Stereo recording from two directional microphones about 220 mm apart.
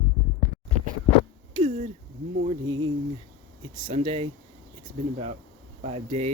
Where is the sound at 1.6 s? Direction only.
30° right (ahead or behind).